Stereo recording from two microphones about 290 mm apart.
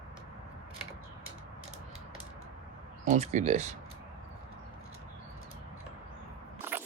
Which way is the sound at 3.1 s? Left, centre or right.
Right.